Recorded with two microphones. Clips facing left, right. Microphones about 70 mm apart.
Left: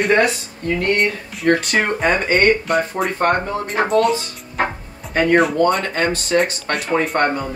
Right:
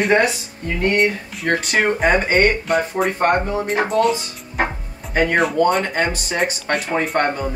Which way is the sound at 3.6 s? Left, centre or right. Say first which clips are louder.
Left 1 dB; centre.